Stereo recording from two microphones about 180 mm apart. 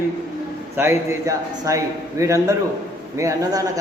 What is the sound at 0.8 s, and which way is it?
A man's voice, 15° right (ahead or behind).